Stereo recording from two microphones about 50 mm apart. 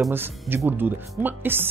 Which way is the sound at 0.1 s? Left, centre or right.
Right.